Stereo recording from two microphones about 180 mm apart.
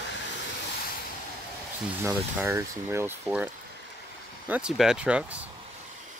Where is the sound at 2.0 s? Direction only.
15° right (ahead or behind).